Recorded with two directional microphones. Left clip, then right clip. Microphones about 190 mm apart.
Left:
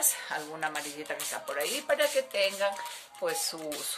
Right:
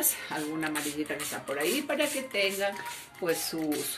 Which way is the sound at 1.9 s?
55° left (ahead or behind).